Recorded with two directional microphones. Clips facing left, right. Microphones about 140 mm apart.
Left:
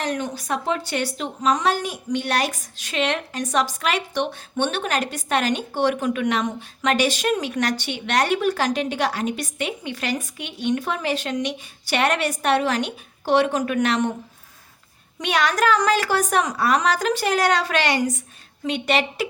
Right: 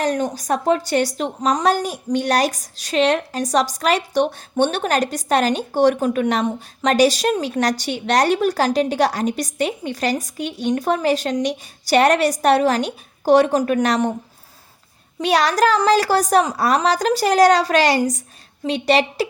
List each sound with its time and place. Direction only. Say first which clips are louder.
0.0 s a woman's voice: right 5 dB; 40° right (ahead or behind)
15.2 s a woman's voice: right 4 dB; 35° right (ahead or behind)